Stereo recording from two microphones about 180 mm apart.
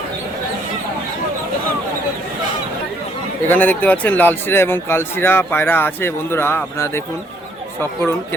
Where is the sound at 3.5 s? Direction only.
10° left (ahead or behind).